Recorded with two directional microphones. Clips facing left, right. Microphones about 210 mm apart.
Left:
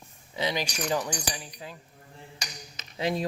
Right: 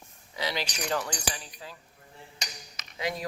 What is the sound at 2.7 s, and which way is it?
Cutlery, 25° left (ahead or behind).